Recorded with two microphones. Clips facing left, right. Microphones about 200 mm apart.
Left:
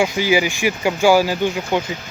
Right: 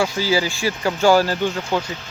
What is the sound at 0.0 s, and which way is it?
Speech, 15° left (ahead or behind).